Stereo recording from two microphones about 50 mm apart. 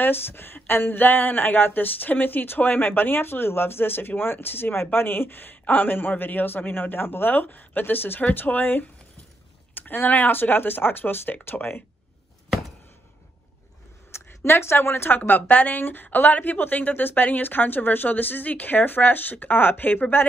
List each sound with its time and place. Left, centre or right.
0.0 s a woman's voice: left
14.1 s a woman's voice: left
15.8 s a woman's voice: left